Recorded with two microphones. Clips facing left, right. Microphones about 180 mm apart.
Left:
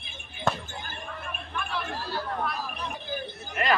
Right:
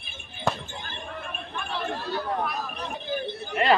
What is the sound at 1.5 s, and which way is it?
Chatter, 30° right (ahead or behind).